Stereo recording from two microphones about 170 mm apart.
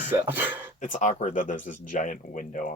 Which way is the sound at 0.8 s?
50° left (ahead or behind).